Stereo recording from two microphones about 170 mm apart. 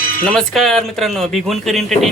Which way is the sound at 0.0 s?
55° left (ahead or behind).